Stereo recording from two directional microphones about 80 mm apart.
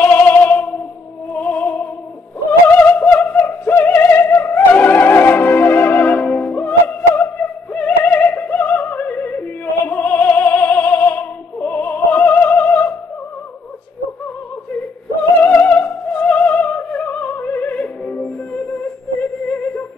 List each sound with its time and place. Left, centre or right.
0.0 s a sound: left
1.3 s opera: centre
2.8 s music: centre
15.4 s music: left
19.5 s music: centre